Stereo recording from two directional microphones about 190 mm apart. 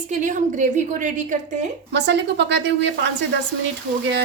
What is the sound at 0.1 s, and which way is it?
A woman's voice, 40° right (ahead or behind).